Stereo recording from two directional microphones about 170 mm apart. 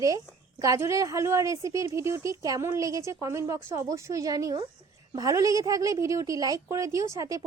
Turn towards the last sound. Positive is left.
turn(degrees=-20)  # may be behind; listen again after turning